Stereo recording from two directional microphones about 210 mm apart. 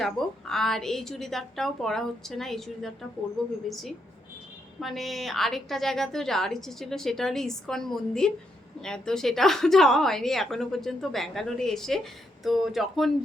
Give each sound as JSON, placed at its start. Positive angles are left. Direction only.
{"t": 0.0, "sound": "a woman's voice", "side_deg": 0}
{"t": 4.8, "sound": "a woman's voice", "side_deg": 0}